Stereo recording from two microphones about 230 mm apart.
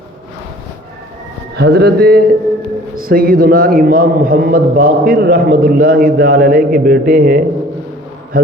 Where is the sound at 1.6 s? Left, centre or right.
Right.